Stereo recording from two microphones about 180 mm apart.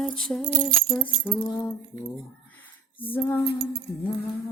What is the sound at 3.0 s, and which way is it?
Speech, 10° left (ahead or behind).